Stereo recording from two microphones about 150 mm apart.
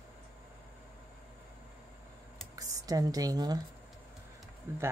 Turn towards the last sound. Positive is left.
turn(degrees=-20)  # may be behind; listen again after turning